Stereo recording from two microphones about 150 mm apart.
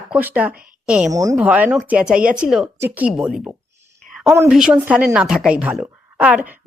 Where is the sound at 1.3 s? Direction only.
10° right (ahead or behind).